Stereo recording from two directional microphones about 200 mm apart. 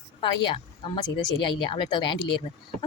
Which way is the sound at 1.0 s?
25° left (ahead or behind).